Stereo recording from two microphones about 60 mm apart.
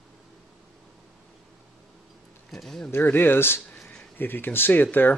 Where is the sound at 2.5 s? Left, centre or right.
Centre.